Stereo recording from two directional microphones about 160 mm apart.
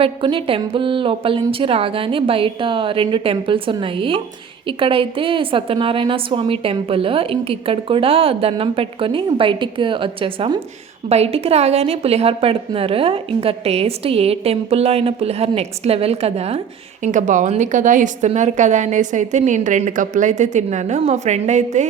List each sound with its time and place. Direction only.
0.0 s a woman's voice: 30° right (ahead or behind)
17.0 s a woman's voice: 50° right (ahead or behind)